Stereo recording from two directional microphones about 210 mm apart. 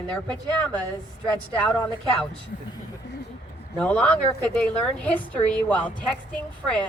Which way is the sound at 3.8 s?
5° left (ahead or behind).